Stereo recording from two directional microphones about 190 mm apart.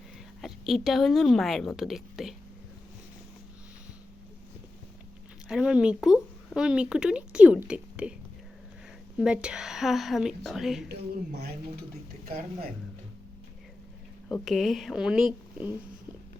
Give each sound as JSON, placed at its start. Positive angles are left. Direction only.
{"t": 0.4, "sound": "speech", "side_deg": 0}
{"t": 5.5, "sound": "speech", "side_deg": -5}
{"t": 9.1, "sound": "speech", "side_deg": -5}
{"t": 10.8, "sound": "speech", "side_deg": -60}
{"t": 14.3, "sound": "speech", "side_deg": 0}